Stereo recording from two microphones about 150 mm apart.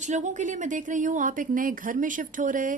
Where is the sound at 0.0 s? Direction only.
55° right (ahead or behind).